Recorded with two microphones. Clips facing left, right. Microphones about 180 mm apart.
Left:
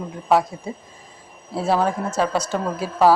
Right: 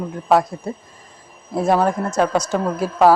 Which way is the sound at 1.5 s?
15° right (ahead or behind).